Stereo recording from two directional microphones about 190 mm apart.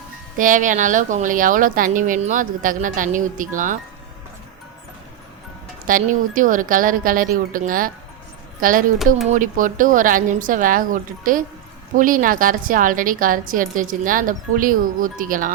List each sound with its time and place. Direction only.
0.3 s a woman's voice: 45° right (ahead or behind)
5.8 s a woman's voice: 45° right (ahead or behind)
9.3 s a woman's voice: 45° right (ahead or behind)